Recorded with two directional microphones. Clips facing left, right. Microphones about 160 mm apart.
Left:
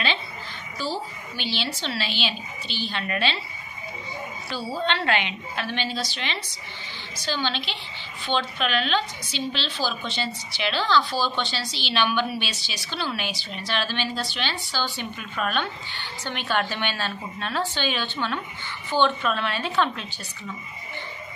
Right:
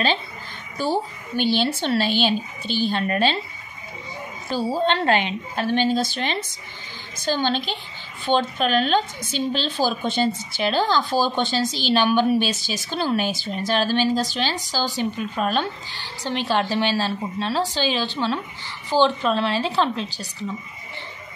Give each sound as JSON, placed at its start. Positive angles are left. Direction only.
{"t": 0.7, "sound": "a woman's voice", "side_deg": -55}
{"t": 4.5, "sound": "a woman's voice", "side_deg": -45}